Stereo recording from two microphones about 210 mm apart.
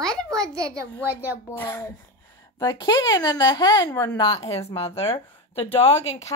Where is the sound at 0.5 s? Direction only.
15° right (ahead or behind).